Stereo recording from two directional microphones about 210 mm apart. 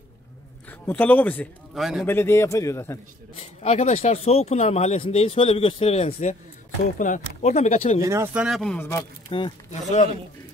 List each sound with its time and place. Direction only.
0.7 s a man's voice: 10° left (ahead or behind)
2.0 s speech: 10° left (ahead or behind)
3.3 s speech: 30° left (ahead or behind)
8.0 s speech: 15° right (ahead or behind); by 9.0 s 10° left (ahead or behind)
9.3 s speech: 30° left (ahead or behind)